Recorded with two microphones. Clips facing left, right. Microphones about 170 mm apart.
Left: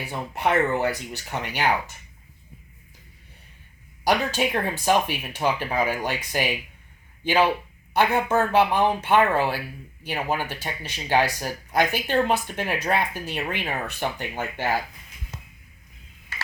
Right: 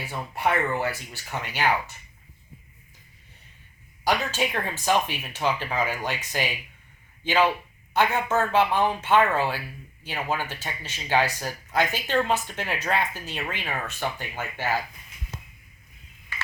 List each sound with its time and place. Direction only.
0.0 s speech: 20° left (ahead or behind)
4.0 s speech: 15° left (ahead or behind)